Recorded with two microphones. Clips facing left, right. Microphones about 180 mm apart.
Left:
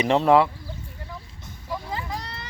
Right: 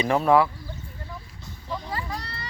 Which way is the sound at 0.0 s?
25° left (ahead or behind).